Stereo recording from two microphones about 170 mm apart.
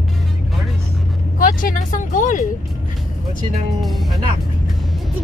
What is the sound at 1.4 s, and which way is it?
Speech, 55° left (ahead or behind).